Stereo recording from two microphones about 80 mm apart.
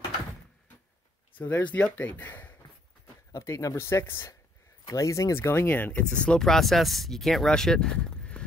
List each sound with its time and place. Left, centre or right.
1.4 s speech: left
3.3 s speech: left
5.7 s speech: left